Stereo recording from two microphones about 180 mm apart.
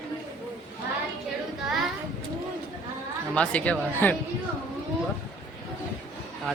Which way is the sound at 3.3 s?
5° left (ahead or behind).